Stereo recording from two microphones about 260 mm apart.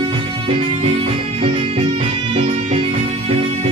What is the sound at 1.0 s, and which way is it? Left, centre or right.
Music, right.